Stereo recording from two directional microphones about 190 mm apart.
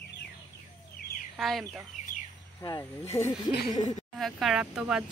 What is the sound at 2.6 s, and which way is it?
Speech, 20° left (ahead or behind).